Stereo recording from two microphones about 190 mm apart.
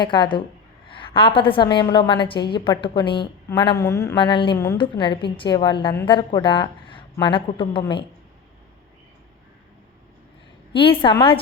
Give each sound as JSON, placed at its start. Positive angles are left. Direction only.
{"t": 0.0, "sound": "speech", "side_deg": 25}
{"t": 10.7, "sound": "a woman's voice", "side_deg": 25}